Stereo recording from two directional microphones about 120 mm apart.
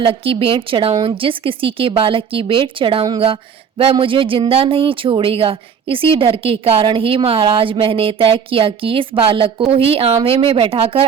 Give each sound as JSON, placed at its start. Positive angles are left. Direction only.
{"t": 0.0, "sound": "speech", "side_deg": -50}